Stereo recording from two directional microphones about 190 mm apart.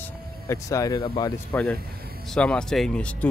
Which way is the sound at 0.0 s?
15° left (ahead or behind).